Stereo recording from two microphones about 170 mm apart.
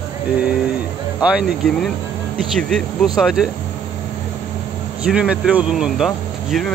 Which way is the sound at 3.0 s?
5° right (ahead or behind).